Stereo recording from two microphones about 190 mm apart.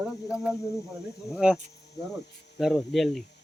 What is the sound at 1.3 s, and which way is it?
Speech, 5° right (ahead or behind).